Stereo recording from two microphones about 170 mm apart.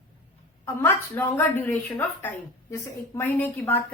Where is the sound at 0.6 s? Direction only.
15° left (ahead or behind).